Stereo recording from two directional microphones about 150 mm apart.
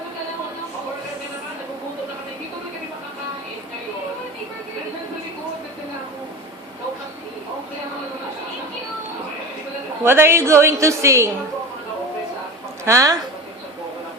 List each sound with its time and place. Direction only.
10.0 s a woman's voice: 15° right (ahead or behind)
12.8 s a woman's voice: 20° right (ahead or behind)